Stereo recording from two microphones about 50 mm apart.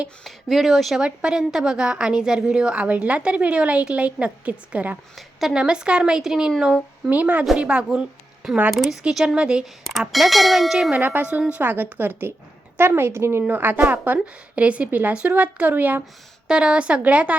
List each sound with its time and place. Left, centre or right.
0.3 s speech: centre
0.9 s a woman's voice: centre
5.1 s speech: centre
5.5 s speech: centre
7.1 s a woman's voice: right
7.9 s a sound: centre
8.7 s speech: centre
9.0 s speech: centre
10.1 s speech: centre
11.0 s a woman's voice: right
13.5 s a woman's voice: right
16.5 s a woman's voice: centre